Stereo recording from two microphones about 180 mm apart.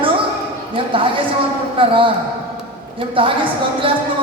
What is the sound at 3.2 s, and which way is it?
Speech, 30° right (ahead or behind).